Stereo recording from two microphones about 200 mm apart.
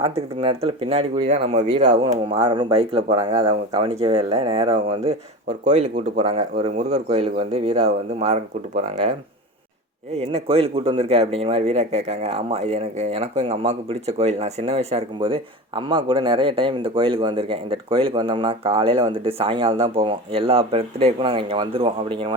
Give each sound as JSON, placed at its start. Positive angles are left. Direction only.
{"t": 0.0, "sound": "speech", "side_deg": -30}
{"t": 2.0, "sound": "a man's voice", "side_deg": -25}
{"t": 5.7, "sound": "speech", "side_deg": -35}
{"t": 10.2, "sound": "a man's voice", "side_deg": -30}